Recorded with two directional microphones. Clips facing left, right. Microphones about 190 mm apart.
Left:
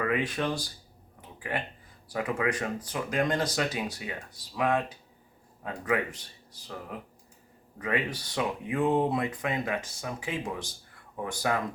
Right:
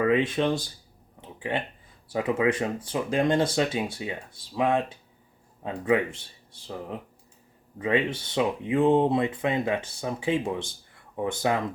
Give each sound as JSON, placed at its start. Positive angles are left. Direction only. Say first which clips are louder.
{"t": 0.0, "sound": "speech", "louder": "right 6 dB", "side_deg": -25}
{"t": 7.8, "sound": "speech", "louder": "right 5 dB", "side_deg": -25}